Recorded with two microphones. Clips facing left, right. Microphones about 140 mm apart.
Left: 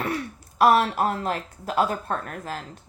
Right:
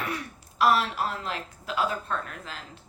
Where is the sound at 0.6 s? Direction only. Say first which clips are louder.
Left 5 dB; 45° left (ahead or behind).